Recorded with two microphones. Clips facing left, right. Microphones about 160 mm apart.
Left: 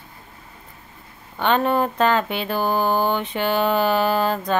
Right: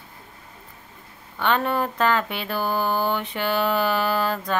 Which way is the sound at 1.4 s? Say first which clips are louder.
Left 3 dB; 20° left (ahead or behind).